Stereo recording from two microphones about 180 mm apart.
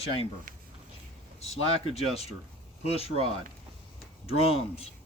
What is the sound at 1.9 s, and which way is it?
Speech, 35° left (ahead or behind).